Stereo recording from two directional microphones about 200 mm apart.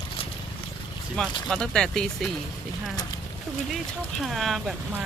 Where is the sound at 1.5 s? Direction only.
Centre (ahead or behind).